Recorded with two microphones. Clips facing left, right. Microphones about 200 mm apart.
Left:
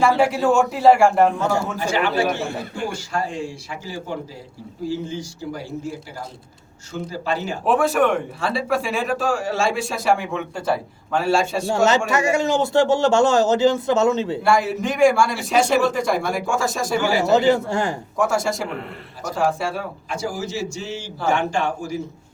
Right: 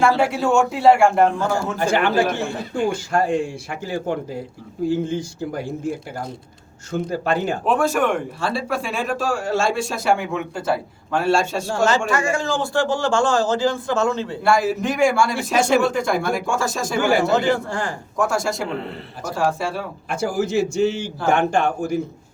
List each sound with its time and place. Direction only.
0.2 s speech: centre (ahead or behind)
1.8 s a man's voice: 55° right (ahead or behind)
7.6 s speech: centre (ahead or behind)
11.7 s a man's voice: 20° left (ahead or behind)
14.4 s speech: centre (ahead or behind)
17.3 s a man's voice: 20° left (ahead or behind)
18.2 s speech: centre (ahead or behind)
20.1 s a man's voice: 55° right (ahead or behind)